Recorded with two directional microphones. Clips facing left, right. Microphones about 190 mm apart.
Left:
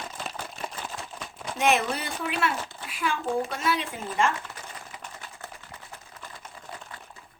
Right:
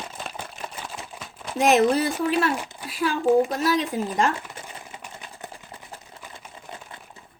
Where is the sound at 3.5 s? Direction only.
40° right (ahead or behind).